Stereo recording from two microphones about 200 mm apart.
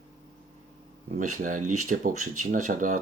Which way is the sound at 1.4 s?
40° right (ahead or behind).